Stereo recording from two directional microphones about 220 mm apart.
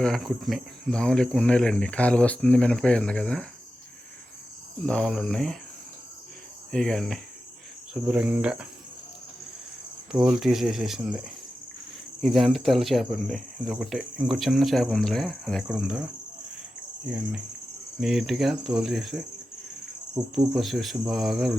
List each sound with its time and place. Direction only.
0.0 s speech: centre (ahead or behind)
4.9 s speech: 5° left (ahead or behind)
6.7 s speech: 5° left (ahead or behind)
10.1 s speech: 5° right (ahead or behind)
12.2 s speech: centre (ahead or behind)
17.1 s speech: 5° right (ahead or behind)
20.3 s speech: centre (ahead or behind)